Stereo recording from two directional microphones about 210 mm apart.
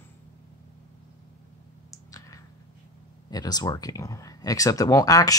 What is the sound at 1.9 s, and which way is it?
Clicking, 15° left (ahead or behind).